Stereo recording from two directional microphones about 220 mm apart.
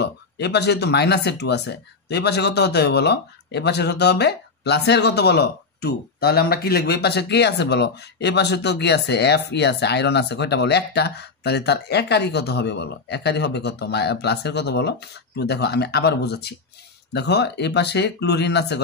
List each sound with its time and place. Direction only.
0.0 s speech: 50° left (ahead or behind)